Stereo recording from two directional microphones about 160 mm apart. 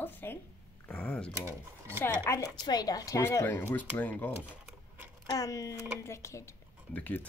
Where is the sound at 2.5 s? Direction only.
25° left (ahead or behind).